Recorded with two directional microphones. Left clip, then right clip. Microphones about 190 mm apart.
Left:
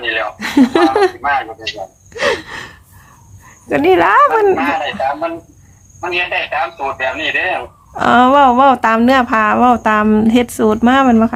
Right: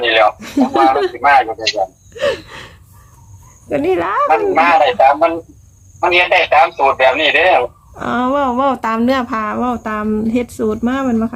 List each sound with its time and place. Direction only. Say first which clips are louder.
0.0 s chuckle: right 7 dB; 45° right (ahead or behind)
0.3 s speech: left 1 dB; 20° left (ahead or behind)
1.2 s a man's voice: right 6 dB; 45° right (ahead or behind)
2.1 s gasp: left 2 dB; 10° left (ahead or behind)
3.7 s speech: left 5 dB; 15° left (ahead or behind)
4.3 s a man's voice: right 2 dB; 45° right (ahead or behind)
7.9 s speech: left 8 dB; 20° left (ahead or behind)